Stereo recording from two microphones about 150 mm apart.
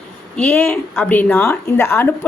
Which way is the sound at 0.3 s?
10° left (ahead or behind).